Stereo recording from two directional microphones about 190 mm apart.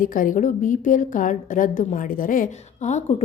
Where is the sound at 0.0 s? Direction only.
45° left (ahead or behind).